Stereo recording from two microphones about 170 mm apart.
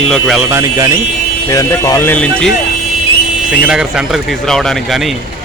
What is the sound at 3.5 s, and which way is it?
Speech, 5° right (ahead or behind).